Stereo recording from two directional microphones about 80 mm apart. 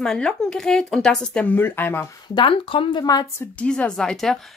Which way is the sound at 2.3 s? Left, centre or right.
Left.